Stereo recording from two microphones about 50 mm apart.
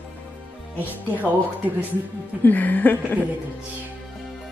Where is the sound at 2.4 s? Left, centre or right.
Left.